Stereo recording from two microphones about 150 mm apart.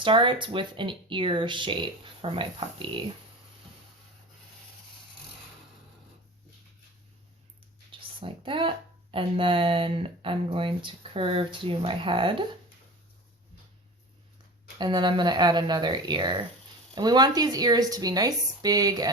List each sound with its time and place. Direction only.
0.0 s speech: 35° right (ahead or behind)
7.9 s a sound: 35° right (ahead or behind)
9.1 s speech: 35° right (ahead or behind)
14.8 s a woman's voice: 30° right (ahead or behind)